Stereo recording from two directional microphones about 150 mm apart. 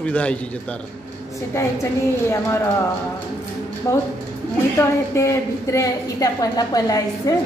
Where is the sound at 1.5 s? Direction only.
20° left (ahead or behind).